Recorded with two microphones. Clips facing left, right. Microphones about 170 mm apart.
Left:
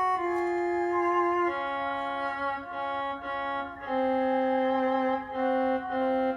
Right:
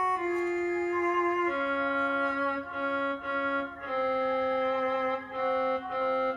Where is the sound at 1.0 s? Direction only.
35° left (ahead or behind).